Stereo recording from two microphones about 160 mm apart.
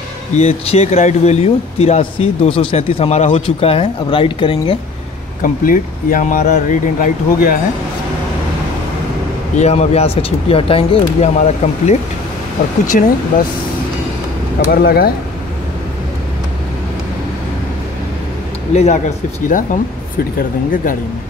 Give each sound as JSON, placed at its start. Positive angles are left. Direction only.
{"t": 0.4, "sound": "speech", "side_deg": 40}
{"t": 5.4, "sound": "speech", "side_deg": 60}
{"t": 9.6, "sound": "speech", "side_deg": 40}
{"t": 12.9, "sound": "speech", "side_deg": 55}
{"t": 14.6, "sound": "speech", "side_deg": 65}
{"t": 18.7, "sound": "speech", "side_deg": 45}